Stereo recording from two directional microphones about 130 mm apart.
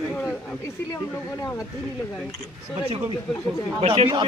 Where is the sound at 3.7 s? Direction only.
45° right (ahead or behind).